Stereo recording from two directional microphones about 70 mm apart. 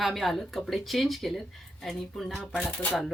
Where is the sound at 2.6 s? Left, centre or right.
Left.